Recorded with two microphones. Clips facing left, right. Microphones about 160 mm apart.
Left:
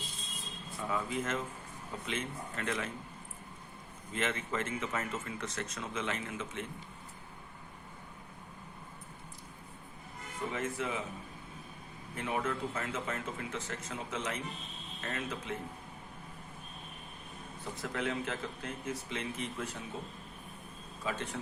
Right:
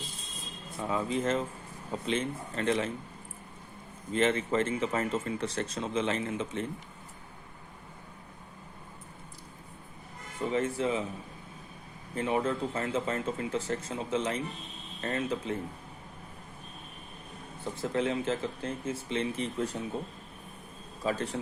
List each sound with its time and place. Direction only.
0.8 s speech: 30° right (ahead or behind)
4.1 s speech: 30° right (ahead or behind)
10.5 s speech: 30° right (ahead or behind)
12.1 s speech: 30° right (ahead or behind)
17.6 s speech: 30° right (ahead or behind)
21.0 s speech: 35° right (ahead or behind)